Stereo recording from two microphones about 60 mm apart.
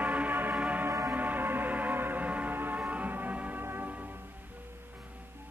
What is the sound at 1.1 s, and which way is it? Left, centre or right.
Music, right.